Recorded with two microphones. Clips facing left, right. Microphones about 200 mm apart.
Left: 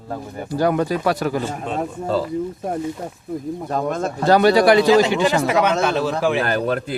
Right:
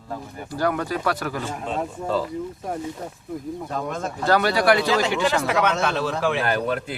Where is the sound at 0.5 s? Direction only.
20° left (ahead or behind).